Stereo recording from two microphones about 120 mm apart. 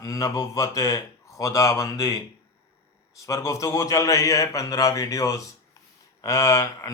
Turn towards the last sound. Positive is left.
turn(degrees=25)  # may be behind; listen again after turning